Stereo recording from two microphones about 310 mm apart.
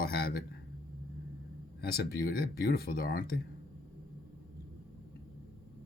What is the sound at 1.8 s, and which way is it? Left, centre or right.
Speech, left.